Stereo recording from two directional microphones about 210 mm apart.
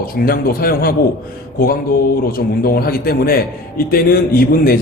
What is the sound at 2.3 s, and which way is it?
A man's voice, 45° left (ahead or behind).